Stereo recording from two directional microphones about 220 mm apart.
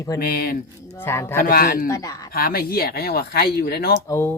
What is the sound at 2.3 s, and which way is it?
Speech, 40° left (ahead or behind).